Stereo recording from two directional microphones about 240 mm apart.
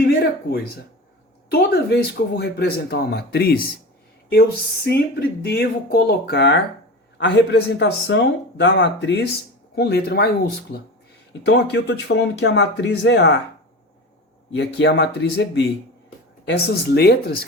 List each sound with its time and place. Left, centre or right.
0.0 s a sound: left
1.7 s speech: left
4.9 s speech: left
14.5 s speech: left